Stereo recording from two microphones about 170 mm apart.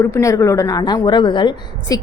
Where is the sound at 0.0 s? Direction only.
15° left (ahead or behind).